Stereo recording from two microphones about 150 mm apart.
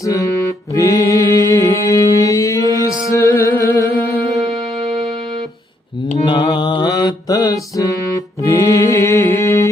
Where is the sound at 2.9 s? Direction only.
20° left (ahead or behind).